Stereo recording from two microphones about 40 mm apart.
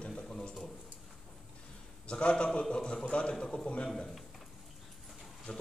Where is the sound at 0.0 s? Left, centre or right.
Centre.